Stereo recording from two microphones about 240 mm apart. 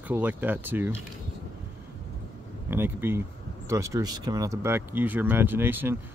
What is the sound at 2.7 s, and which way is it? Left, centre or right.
Speech, centre.